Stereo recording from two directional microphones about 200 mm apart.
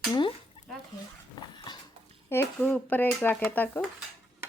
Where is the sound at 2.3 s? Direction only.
10° left (ahead or behind).